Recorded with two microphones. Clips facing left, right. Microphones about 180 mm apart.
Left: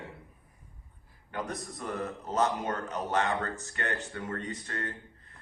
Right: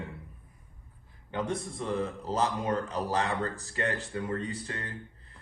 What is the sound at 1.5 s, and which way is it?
A man's voice, 25° right (ahead or behind).